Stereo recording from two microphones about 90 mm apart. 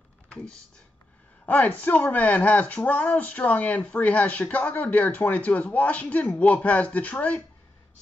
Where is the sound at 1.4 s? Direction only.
20° left (ahead or behind).